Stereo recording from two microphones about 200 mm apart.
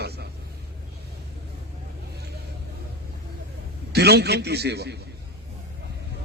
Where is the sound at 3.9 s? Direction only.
55° right (ahead or behind).